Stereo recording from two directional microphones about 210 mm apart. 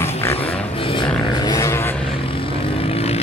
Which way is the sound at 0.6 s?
25° left (ahead or behind).